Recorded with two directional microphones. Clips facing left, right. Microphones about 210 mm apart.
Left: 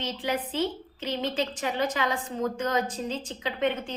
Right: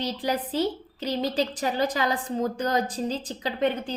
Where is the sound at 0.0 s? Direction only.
35° right (ahead or behind).